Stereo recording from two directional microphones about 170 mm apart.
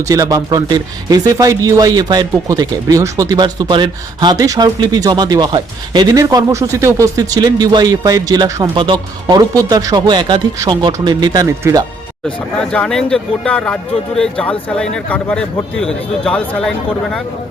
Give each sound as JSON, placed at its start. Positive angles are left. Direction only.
{"t": 0.0, "sound": "speech", "side_deg": -20}
{"t": 12.5, "sound": "speech", "side_deg": 5}